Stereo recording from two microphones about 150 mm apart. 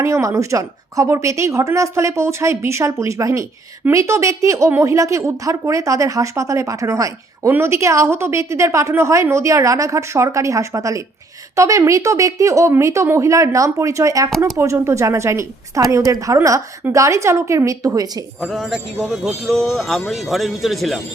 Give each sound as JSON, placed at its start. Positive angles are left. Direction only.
{"t": 0.0, "sound": "a woman's voice", "side_deg": -20}
{"t": 14.3, "sound": "speech", "side_deg": 0}
{"t": 14.5, "sound": "a woman's voice", "side_deg": -20}
{"t": 18.3, "sound": "speech", "side_deg": 0}